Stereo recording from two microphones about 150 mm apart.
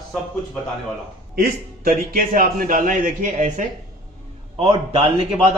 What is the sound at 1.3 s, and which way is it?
A man's voice, 80° right.